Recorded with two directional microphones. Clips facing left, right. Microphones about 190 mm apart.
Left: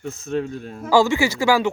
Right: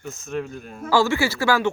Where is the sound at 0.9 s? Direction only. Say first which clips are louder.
Left 3 dB; 15° left (ahead or behind).